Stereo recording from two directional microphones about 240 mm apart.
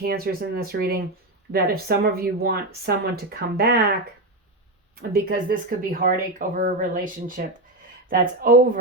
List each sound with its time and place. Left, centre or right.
0.0 s speech: right
5.1 s speech: right